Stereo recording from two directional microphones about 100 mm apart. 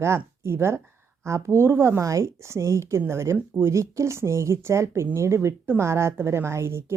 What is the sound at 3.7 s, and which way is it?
A woman's voice, 30° right (ahead or behind).